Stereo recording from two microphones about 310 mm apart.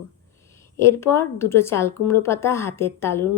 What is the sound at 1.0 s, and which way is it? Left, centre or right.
A woman's voice, centre.